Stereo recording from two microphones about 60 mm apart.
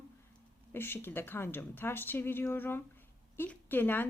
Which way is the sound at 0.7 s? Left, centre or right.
Left.